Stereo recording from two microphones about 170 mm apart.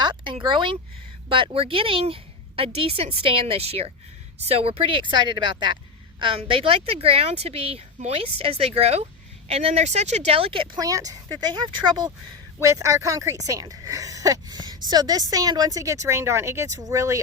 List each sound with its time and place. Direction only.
0.0 s a woman's voice: 25° right (ahead or behind)